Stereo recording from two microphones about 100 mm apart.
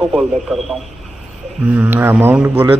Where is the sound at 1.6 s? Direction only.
20° right (ahead or behind).